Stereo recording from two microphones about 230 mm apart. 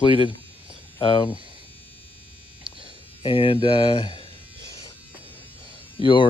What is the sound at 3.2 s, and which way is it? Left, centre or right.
Speech, left.